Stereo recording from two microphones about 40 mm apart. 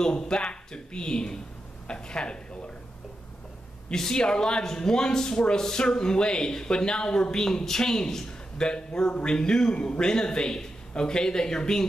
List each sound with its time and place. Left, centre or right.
0.0 s speech: centre
3.9 s a man's voice: centre